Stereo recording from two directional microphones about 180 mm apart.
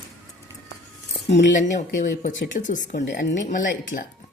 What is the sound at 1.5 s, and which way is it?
Speech, 45° left (ahead or behind).